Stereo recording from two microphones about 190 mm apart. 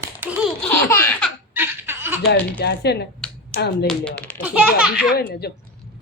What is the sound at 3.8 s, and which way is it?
Speech, 5° left (ahead or behind).